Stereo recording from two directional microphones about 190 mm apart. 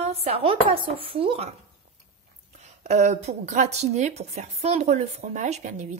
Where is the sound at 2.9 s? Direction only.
35° right (ahead or behind).